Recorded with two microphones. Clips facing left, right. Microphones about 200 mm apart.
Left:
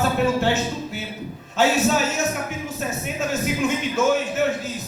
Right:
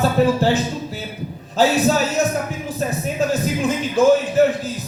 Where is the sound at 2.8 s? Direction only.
35° right (ahead or behind).